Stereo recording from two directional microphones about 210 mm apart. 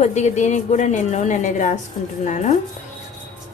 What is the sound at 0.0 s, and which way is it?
A woman's voice, 35° left (ahead or behind).